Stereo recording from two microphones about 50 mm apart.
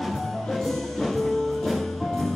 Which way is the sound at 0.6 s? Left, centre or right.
Centre.